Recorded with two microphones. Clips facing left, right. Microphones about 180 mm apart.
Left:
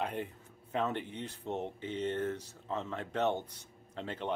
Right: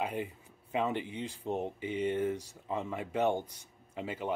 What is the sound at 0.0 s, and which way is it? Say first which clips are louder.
Speech: right 2 dB; 10° right (ahead or behind).